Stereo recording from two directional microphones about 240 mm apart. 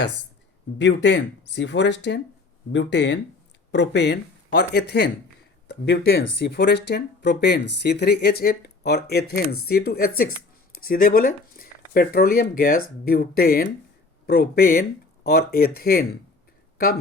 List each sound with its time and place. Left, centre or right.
0.8 s speech: left